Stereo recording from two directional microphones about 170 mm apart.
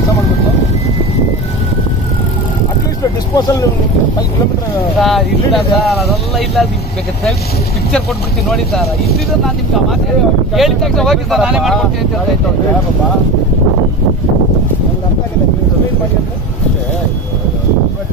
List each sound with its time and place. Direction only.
3.3 s speech: 20° left (ahead or behind)
5.0 s speech: centre (ahead or behind)
10.5 s speech: centre (ahead or behind)